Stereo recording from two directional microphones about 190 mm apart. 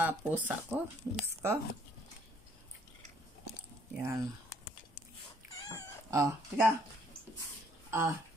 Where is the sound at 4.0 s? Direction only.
15° right (ahead or behind).